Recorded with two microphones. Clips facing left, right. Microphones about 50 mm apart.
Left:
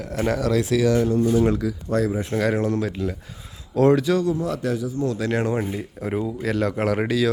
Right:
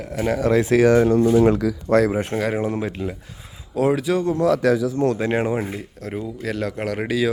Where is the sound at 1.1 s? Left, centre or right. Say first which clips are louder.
Right 4 dB; right.